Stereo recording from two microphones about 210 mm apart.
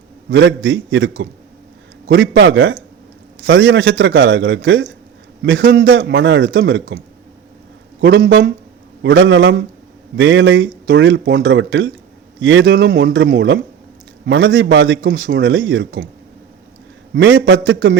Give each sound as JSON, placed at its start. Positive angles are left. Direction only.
{"t": 0.3, "sound": "a man's voice", "side_deg": -60}
{"t": 8.0, "sound": "a man's voice", "side_deg": -55}
{"t": 17.2, "sound": "a man's voice", "side_deg": -60}